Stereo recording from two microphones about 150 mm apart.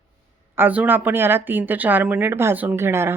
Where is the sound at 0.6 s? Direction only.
10° right (ahead or behind).